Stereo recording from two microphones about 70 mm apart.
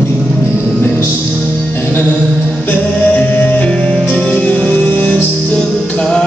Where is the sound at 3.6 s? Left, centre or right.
Centre.